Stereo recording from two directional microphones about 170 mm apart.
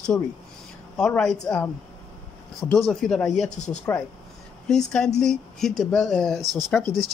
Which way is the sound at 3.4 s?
40° left (ahead or behind).